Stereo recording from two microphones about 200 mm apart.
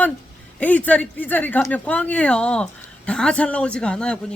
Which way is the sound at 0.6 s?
5° left (ahead or behind).